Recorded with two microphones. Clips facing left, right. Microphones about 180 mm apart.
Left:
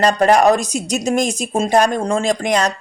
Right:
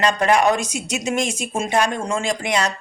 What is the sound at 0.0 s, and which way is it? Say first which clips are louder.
Speech: left 4 dB; 40° left (ahead or behind).